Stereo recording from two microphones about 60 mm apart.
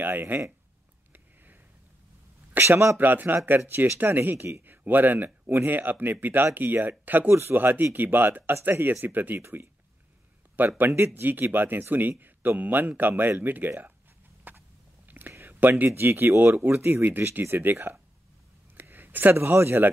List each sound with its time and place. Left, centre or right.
0.0 s speech: right
1.1 s a sound: right
2.6 s speech: right
3.0 s speech: right
14.5 s a sound: right
15.0 s whispering: right
15.3 s speech: right